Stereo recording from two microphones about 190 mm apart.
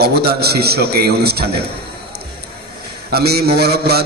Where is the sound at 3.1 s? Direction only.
55° right (ahead or behind).